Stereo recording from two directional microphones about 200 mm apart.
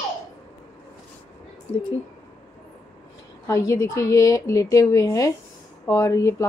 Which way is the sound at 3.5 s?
15° left (ahead or behind).